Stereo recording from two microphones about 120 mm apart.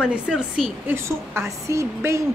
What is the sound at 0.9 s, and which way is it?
A woman's voice, 20° right (ahead or behind).